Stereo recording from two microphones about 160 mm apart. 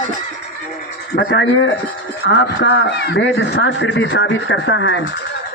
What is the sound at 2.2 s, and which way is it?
Speech, 90° left.